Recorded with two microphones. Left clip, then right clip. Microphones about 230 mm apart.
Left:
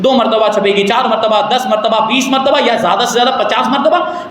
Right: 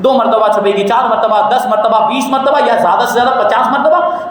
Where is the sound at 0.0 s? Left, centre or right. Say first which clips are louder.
Right 1 dB; centre.